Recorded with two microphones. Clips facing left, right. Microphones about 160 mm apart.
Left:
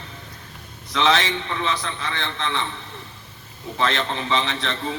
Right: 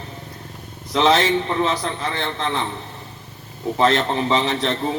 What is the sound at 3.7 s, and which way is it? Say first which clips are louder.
A man's voice: right 6 dB; 40° right (ahead or behind).